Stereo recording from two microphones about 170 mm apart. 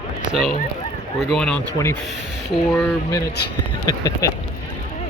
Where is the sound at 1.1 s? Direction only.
5° left (ahead or behind).